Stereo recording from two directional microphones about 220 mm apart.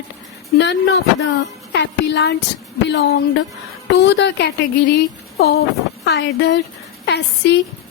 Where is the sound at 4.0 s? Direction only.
50° left (ahead or behind).